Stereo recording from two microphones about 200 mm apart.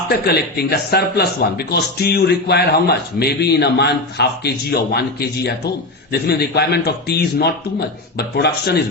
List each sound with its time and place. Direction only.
0.3 s speech: 50° left (ahead or behind)